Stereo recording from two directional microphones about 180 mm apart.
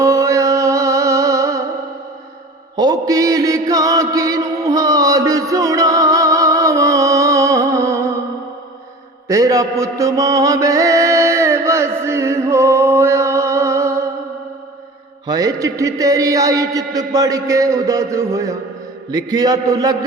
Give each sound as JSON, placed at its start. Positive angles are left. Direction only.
{"t": 0.0, "sound": "music", "side_deg": -15}
{"t": 2.7, "sound": "chant", "side_deg": -20}
{"t": 9.2, "sound": "mantra", "side_deg": -20}
{"t": 15.3, "sound": "a man's voice", "side_deg": -20}